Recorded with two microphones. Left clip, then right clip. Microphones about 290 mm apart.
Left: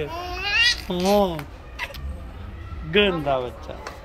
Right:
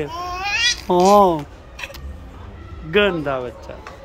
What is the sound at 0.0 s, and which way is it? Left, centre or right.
Babbling, centre.